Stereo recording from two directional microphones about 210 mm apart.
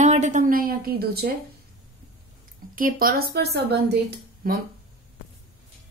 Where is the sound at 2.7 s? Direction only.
40° right (ahead or behind).